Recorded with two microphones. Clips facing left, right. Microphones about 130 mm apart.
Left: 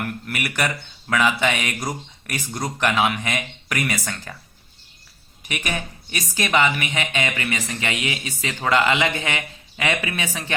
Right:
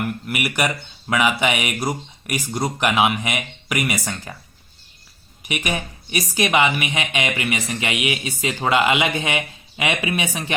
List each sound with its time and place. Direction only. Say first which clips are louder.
0.3 s speech: right 2 dB; 15° right (ahead or behind)
5.5 s speech: right 3 dB; 15° right (ahead or behind)